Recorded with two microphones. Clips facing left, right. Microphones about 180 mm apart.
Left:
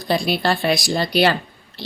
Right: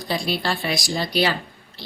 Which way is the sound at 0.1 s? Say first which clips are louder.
Left 5 dB; 65° left (ahead or behind).